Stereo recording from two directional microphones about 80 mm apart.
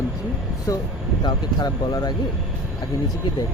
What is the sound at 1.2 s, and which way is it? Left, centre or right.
Speech, left.